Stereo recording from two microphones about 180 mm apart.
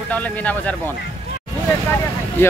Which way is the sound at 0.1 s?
10° left (ahead or behind).